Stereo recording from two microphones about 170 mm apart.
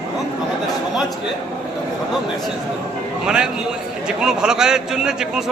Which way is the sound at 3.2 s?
5° right (ahead or behind).